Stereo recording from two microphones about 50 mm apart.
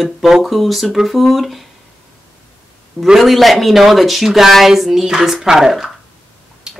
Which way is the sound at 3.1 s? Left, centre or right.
Centre.